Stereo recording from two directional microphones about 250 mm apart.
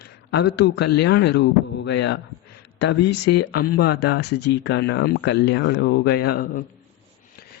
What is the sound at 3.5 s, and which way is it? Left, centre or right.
Speech, left.